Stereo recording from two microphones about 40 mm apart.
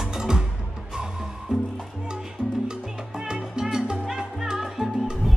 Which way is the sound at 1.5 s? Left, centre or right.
Centre.